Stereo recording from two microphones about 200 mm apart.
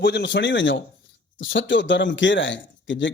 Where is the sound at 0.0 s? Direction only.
60° left (ahead or behind).